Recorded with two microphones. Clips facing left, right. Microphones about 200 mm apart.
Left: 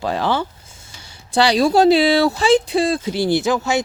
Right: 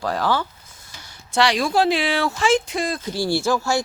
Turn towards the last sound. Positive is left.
turn(degrees=20)  # may be behind; listen again after turning